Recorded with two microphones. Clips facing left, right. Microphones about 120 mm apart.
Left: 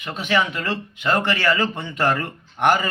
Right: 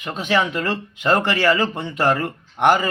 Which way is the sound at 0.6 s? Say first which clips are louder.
Right 3 dB; 35° right (ahead or behind).